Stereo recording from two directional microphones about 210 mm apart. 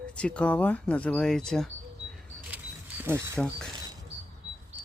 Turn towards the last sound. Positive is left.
turn(degrees=-15)  # may be behind; listen again after turning